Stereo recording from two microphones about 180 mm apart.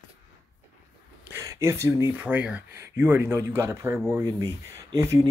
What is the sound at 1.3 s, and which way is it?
Speech, 15° right (ahead or behind).